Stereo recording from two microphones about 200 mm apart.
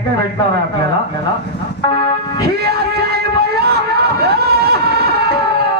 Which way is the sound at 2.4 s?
50° right (ahead or behind).